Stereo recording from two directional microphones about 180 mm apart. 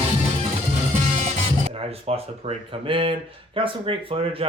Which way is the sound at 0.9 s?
45° right (ahead or behind).